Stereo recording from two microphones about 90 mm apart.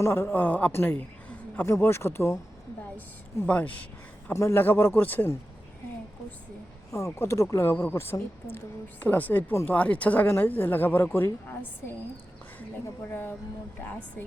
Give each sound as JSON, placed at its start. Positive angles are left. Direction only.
{"t": 0.0, "sound": "speech", "side_deg": 30}
{"t": 0.7, "sound": "a sound", "side_deg": 20}
{"t": 1.6, "sound": "speech", "side_deg": 30}
{"t": 3.4, "sound": "speech", "side_deg": 15}
{"t": 4.3, "sound": "speech", "side_deg": 25}
{"t": 6.9, "sound": "speech", "side_deg": 35}
{"t": 13.0, "sound": "speech", "side_deg": 25}